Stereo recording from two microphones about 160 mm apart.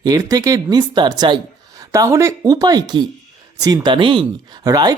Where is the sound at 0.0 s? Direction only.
25° right (ahead or behind).